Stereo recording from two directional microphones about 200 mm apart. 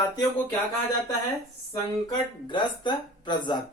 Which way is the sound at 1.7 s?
20° left (ahead or behind).